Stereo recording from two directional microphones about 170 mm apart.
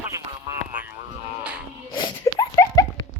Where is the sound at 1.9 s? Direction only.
25° left (ahead or behind).